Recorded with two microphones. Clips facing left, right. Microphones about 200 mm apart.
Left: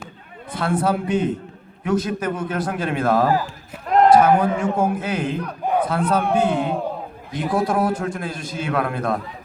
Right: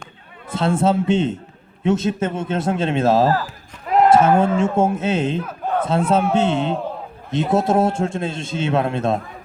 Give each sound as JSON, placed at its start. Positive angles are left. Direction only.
{"t": 0.5, "sound": "a man's voice", "side_deg": -25}
{"t": 3.4, "sound": "run", "side_deg": -5}
{"t": 4.1, "sound": "a man's voice", "side_deg": -25}